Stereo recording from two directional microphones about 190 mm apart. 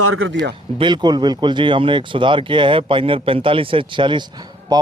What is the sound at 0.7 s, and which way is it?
Speech, 25° right (ahead or behind).